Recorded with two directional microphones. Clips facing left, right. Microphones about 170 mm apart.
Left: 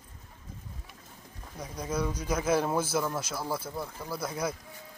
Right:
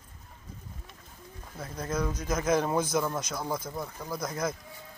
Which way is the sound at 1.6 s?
10° left (ahead or behind).